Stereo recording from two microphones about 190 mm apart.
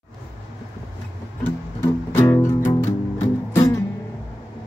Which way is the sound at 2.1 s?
15° left (ahead or behind).